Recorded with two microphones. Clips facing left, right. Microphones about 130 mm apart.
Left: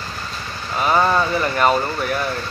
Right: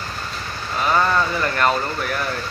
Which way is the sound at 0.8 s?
20° left (ahead or behind).